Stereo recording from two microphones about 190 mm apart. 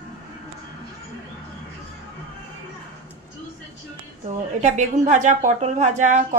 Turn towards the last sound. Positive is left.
turn(degrees=-40)  # may be behind; listen again after turning